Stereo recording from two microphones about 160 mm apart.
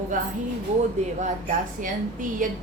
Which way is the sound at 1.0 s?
45° right (ahead or behind).